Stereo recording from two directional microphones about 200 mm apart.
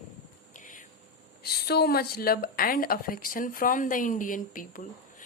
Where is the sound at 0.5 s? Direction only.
40° left (ahead or behind).